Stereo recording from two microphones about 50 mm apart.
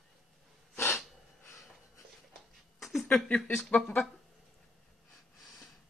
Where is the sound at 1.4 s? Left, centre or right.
Left.